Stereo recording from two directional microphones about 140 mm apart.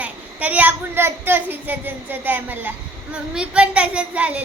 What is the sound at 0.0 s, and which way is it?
A child's voice, 10° right (ahead or behind).